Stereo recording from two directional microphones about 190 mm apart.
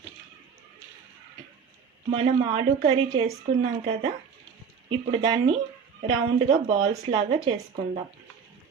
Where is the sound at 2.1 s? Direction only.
30° right (ahead or behind).